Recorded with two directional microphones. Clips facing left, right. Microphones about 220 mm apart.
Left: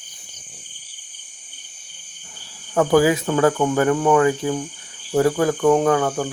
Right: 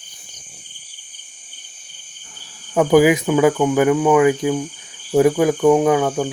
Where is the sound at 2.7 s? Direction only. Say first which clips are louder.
Right 3 dB; 15° right (ahead or behind).